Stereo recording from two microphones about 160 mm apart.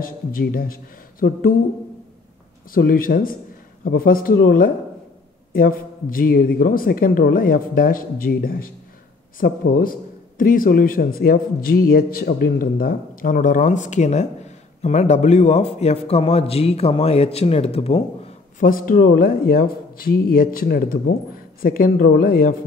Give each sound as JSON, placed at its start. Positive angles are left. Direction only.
{"t": 0.0, "sound": "a man's voice", "side_deg": 65}
{"t": 2.7, "sound": "a man's voice", "side_deg": 65}
{"t": 18.6, "sound": "a man's voice", "side_deg": 60}